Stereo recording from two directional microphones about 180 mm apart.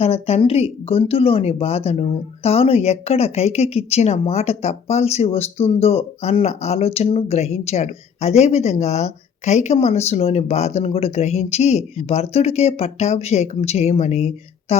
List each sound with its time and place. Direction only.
0.0 s speech: 35° left (ahead or behind)